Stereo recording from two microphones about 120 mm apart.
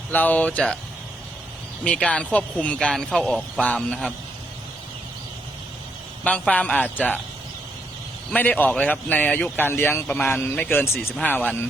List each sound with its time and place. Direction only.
0.1 s a man's voice: 15° left (ahead or behind)
1.8 s a man's voice: 10° left (ahead or behind)
6.2 s a man's voice: 10° left (ahead or behind)
8.3 s a man's voice: 15° left (ahead or behind)